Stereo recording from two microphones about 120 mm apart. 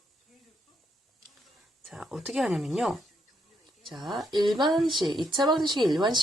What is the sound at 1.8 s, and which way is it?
Speech, 5° right (ahead or behind).